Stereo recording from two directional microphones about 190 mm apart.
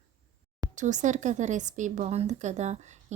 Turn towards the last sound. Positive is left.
turn(degrees=-35)  # may be behind; listen again after turning